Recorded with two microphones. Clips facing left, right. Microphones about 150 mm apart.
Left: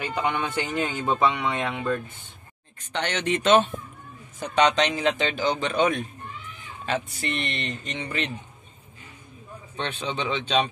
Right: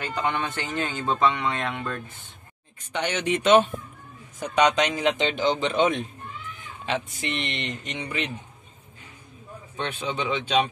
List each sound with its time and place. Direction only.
0.0 s speech: 10° left (ahead or behind)
2.8 s a man's voice: 10° right (ahead or behind)
9.8 s a man's voice: 10° right (ahead or behind)